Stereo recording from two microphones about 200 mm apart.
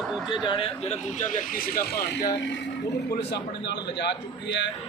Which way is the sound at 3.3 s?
60° left (ahead or behind).